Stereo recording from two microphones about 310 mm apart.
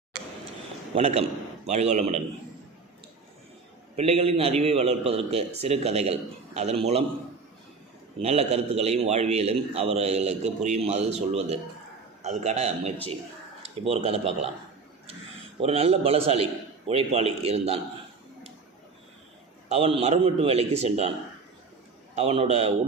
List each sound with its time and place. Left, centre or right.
0.9 s a man's voice: centre
3.9 s a man's voice: centre
8.2 s a man's voice: right
15.6 s a man's voice: centre
19.6 s a man's voice: centre
22.1 s a man's voice: centre